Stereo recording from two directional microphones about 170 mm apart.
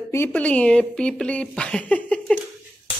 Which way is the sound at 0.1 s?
10° left (ahead or behind).